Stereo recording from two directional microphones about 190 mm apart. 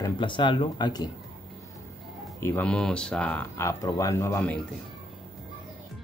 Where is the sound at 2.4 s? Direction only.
10° left (ahead or behind).